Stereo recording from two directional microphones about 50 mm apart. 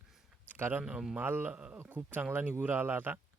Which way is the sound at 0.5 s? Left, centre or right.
Right.